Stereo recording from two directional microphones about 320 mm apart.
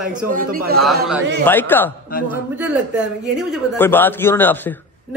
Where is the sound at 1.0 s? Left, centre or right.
Centre.